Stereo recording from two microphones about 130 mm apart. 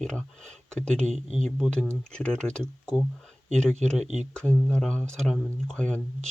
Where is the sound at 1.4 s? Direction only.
5° left (ahead or behind).